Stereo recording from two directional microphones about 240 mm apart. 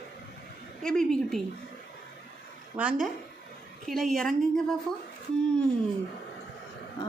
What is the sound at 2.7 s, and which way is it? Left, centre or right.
A woman's voice, centre.